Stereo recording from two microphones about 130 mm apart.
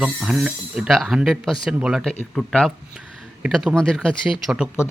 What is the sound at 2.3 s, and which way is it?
Speech, 5° left (ahead or behind).